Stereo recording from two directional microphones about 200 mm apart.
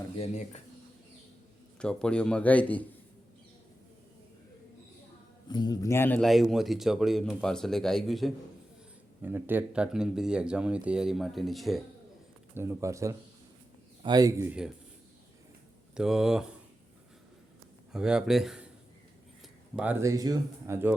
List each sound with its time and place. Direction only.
0.2 s speech: 35° left (ahead or behind)
1.8 s a man's voice: 5° left (ahead or behind)
5.5 s a man's voice: 20° left (ahead or behind); by 8.3 s centre (ahead or behind)
9.2 s a man's voice: 10° right (ahead or behind)
12.5 s speech: 15° right (ahead or behind)
16.0 s a man's voice: 5° right (ahead or behind)
17.9 s a man's voice: 5° right (ahead or behind)
19.7 s speech: 10° right (ahead or behind)